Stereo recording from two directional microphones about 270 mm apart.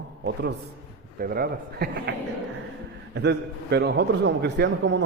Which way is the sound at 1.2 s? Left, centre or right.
Right.